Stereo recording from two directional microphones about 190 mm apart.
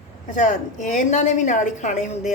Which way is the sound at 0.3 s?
40° left (ahead or behind).